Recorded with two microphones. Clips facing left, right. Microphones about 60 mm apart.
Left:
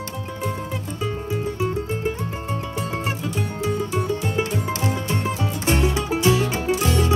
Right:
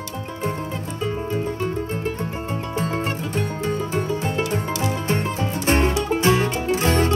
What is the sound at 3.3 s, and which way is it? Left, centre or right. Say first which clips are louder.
Music: right 1 dB; right.